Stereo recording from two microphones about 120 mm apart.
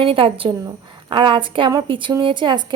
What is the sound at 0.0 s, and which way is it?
Speech, 50° right (ahead or behind).